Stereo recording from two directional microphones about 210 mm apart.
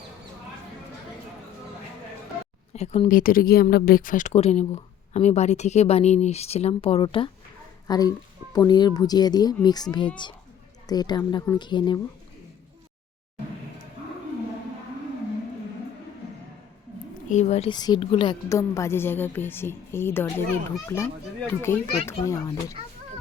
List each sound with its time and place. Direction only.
2.7 s a woman's voice: 30° left (ahead or behind)
17.2 s a woman's voice: 35° left (ahead or behind); by 22.5 s 15° left (ahead or behind)
22.8 s speech: 25° right (ahead or behind)